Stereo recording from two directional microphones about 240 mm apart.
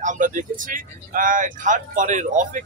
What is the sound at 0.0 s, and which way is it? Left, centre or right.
Speech, right.